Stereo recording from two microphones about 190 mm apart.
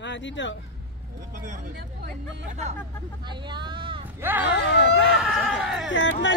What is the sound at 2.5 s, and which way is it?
Speech, 35° right (ahead or behind).